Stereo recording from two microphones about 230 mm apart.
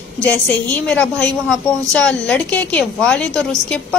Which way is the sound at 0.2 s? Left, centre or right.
Centre.